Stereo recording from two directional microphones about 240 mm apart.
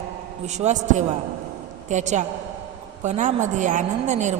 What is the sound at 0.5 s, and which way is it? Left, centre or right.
A woman's voice, right.